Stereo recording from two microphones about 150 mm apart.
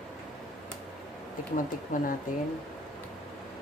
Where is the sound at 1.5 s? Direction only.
65° left (ahead or behind).